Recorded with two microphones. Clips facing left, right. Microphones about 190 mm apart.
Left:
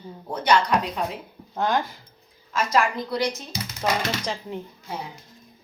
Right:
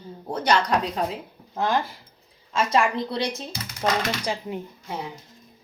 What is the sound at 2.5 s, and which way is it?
Speech, 25° right (ahead or behind).